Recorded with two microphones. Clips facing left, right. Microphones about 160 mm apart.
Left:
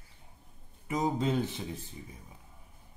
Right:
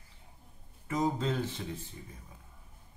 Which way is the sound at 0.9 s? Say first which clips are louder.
Left 1 dB; 15° left (ahead or behind).